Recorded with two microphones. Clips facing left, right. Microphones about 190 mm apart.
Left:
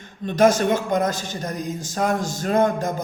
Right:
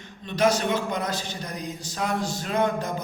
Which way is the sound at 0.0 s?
50° left (ahead or behind).